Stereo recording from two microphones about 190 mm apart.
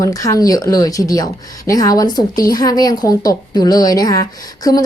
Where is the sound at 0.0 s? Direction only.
15° left (ahead or behind).